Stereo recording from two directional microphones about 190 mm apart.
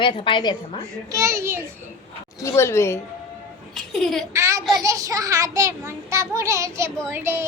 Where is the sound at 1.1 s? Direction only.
15° right (ahead or behind).